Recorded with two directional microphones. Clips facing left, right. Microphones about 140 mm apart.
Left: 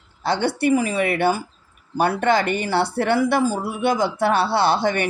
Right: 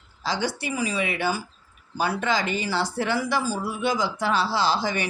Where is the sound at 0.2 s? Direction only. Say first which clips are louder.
Left 7 dB; 60° left (ahead or behind).